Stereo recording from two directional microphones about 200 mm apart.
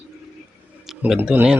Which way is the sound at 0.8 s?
Centre (ahead or behind).